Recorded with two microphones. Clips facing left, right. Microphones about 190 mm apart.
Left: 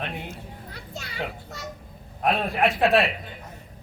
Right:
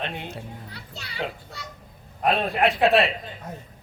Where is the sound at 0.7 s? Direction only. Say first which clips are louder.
Left 3 dB; 45° left (ahead or behind).